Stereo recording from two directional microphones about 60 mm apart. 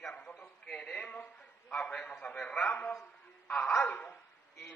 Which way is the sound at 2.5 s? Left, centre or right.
Left.